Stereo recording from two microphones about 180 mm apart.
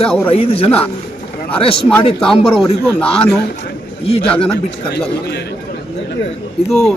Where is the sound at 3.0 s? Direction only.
15° left (ahead or behind).